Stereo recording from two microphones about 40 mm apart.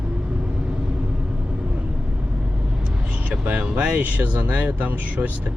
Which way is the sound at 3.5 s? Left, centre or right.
Right.